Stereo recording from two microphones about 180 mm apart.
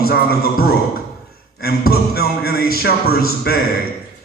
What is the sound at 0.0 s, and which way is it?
Speech, 55° left (ahead or behind).